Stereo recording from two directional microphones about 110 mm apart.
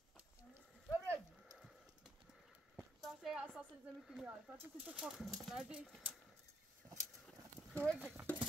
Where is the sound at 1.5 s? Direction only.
5° right (ahead or behind).